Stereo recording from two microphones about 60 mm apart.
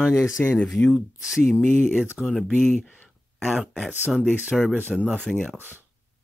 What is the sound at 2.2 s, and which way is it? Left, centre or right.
Speech, centre.